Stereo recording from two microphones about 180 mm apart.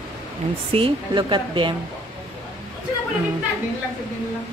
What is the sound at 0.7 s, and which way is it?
A woman's voice, 30° right (ahead or behind).